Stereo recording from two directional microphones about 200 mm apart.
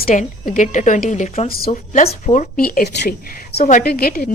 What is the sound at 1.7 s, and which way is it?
Speech, 35° left (ahead or behind).